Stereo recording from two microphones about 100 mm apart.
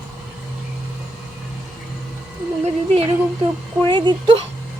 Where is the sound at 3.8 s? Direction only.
50° right (ahead or behind).